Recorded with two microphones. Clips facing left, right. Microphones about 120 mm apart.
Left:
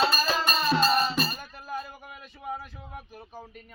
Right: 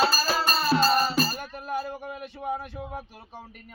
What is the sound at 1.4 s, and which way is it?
Music, 70° right (ahead or behind).